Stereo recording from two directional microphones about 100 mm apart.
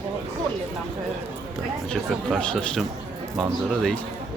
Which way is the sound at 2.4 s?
10° left (ahead or behind).